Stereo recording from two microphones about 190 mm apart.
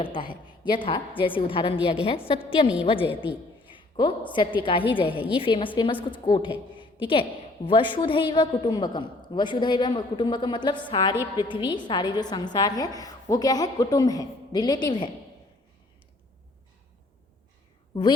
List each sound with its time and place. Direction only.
0.0 s a woman's voice: 25° left (ahead or behind)
3.7 s a sound: 25° left (ahead or behind)
4.3 s a woman's voice: 25° left (ahead or behind)